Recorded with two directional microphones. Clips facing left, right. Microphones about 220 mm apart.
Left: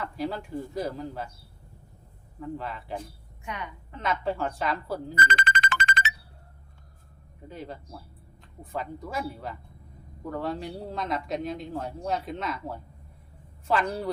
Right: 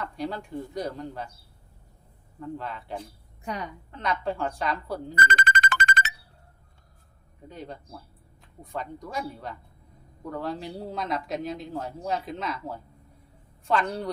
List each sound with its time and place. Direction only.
0.0 s a man's voice: centre (ahead or behind)
2.4 s a man's voice: centre (ahead or behind)
3.4 s a woman's voice: 35° right (ahead or behind)
3.9 s a man's voice: centre (ahead or behind)
5.2 s music: 45° right (ahead or behind)
7.4 s a man's voice: centre (ahead or behind)